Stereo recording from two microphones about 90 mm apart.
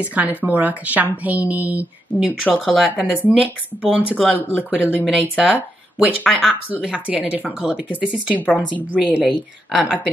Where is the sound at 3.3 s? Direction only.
10° right (ahead or behind).